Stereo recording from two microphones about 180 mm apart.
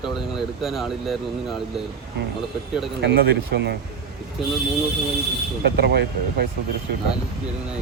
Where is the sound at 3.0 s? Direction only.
65° right (ahead or behind).